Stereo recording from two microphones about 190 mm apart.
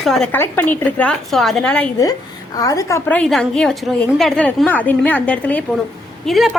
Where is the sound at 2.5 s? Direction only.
20° left (ahead or behind).